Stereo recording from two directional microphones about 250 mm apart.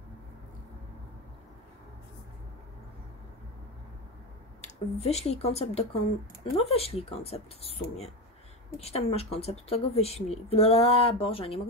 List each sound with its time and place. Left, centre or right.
4.6 s speech: left